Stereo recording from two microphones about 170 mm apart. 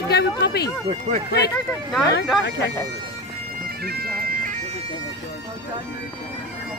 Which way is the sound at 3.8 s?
65° right (ahead or behind).